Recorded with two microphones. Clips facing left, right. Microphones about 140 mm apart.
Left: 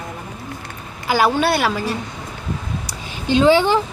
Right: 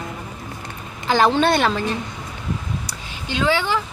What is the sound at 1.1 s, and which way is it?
Speech, 10° left (ahead or behind).